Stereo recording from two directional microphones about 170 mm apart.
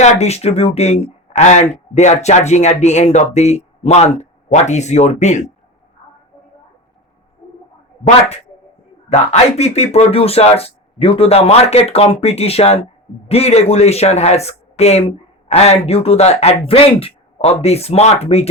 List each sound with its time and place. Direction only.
0.0 s speech: 40° left (ahead or behind)
9.0 s speech: 40° left (ahead or behind)